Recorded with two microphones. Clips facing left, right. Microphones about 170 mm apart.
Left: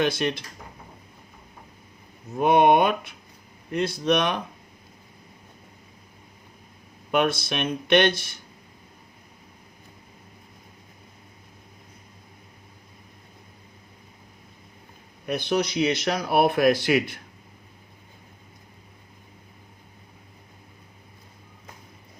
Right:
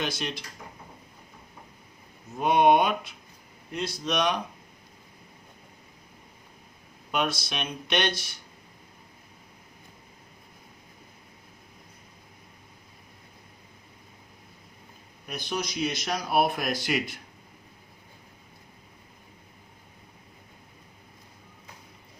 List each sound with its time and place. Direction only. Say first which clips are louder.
0.0 s speech: left 8 dB; 55° left (ahead or behind)
2.4 s speech: left 3 dB; 55° left (ahead or behind)
7.1 s speech: left 6 dB; 55° left (ahead or behind)
15.3 s speech: left 8 dB; 60° left (ahead or behind)